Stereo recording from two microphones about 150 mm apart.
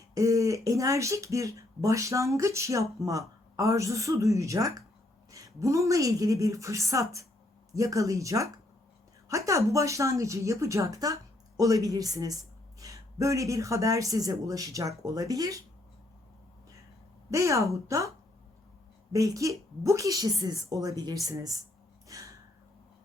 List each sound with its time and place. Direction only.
0.1 s a woman's voice: 20° right (ahead or behind)
17.3 s a woman's voice: 20° right (ahead or behind)
19.1 s a woman's voice: 20° right (ahead or behind)
22.0 s gasp: 20° right (ahead or behind)